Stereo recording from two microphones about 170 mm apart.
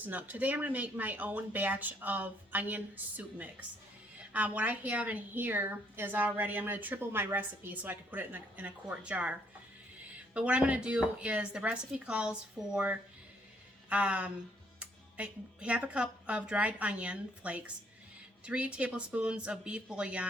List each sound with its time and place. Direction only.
0.0 s a woman's voice: 10° right (ahead or behind)
10.3 s a woman's voice: 5° right (ahead or behind)